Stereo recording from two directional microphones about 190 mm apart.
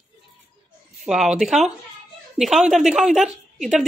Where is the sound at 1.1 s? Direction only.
Centre (ahead or behind).